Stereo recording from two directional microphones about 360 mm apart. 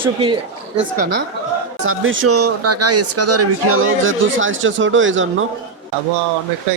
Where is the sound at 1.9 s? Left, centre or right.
Right.